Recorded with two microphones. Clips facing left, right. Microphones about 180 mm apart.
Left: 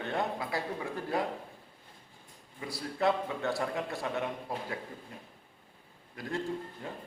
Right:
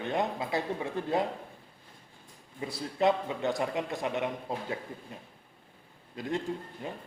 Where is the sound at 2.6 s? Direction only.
20° right (ahead or behind).